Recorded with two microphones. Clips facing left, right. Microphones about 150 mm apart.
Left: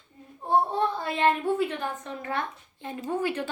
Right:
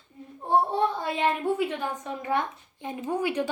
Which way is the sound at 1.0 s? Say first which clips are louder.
Left 1 dB; 15° right (ahead or behind).